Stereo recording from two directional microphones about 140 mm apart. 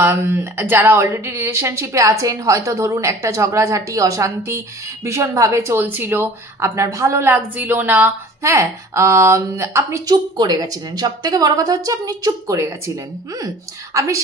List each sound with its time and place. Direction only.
0.0 s speech: 15° right (ahead or behind)